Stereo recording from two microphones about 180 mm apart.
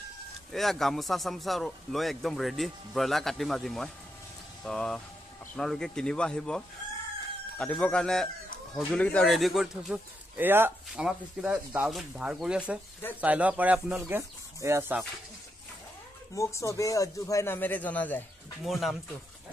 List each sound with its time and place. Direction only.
0.5 s speech: centre (ahead or behind)
16.3 s speech: 15° left (ahead or behind); by 18.9 s centre (ahead or behind)